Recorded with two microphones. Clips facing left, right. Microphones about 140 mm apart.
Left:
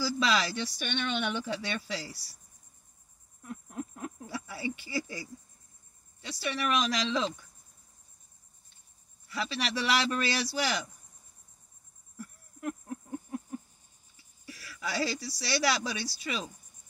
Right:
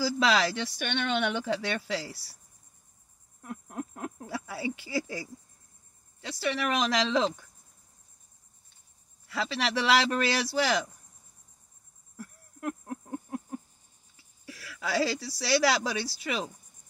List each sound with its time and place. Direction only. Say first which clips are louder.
0.2 s speech: right 4 dB; 90° right
3.4 s a sound: right 2 dB; 70° right (ahead or behind)
4.3 s speech: right 2 dB; 90° right
6.2 s speech: right 3 dB; 90° right
9.3 s speech: right 3 dB; 90° right
12.2 s a sound: right 2 dB; 85° right; by 13.6 s 60° right (ahead or behind)
14.6 s speech: right 4 dB; 90° right